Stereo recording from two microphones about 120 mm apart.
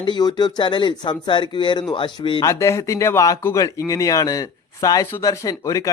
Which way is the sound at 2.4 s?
25° left (ahead or behind).